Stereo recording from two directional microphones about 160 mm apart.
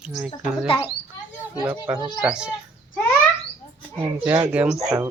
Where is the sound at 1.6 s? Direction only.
10° right (ahead or behind).